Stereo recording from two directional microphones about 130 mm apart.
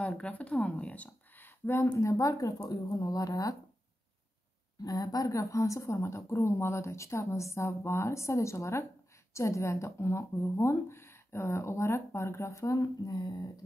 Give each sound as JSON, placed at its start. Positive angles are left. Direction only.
{"t": 0.0, "sound": "speech", "side_deg": 10}
{"t": 4.8, "sound": "speech", "side_deg": 30}